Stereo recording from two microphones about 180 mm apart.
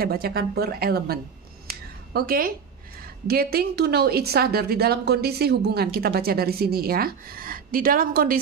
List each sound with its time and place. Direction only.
0.0 s a woman's voice: 60° right (ahead or behind)
1.7 s a sound: 55° right (ahead or behind)
3.3 s a woman's voice: 60° right (ahead or behind)